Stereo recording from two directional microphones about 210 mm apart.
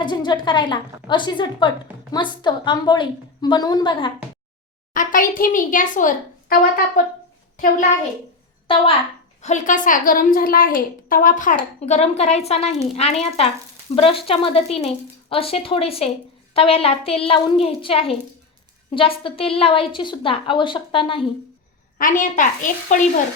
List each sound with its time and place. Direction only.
0.0 s a woman's voice: 20° left (ahead or behind)
4.9 s a child's voice: 40° left (ahead or behind)
9.4 s a child's voice: 35° left (ahead or behind)
21.9 s a child's voice: 40° left (ahead or behind)